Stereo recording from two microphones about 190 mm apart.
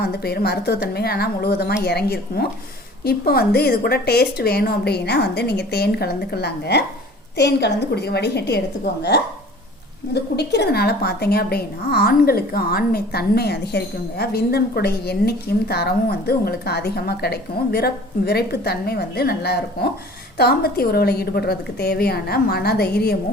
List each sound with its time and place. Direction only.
0.0 s a woman's voice: 55° left (ahead or behind)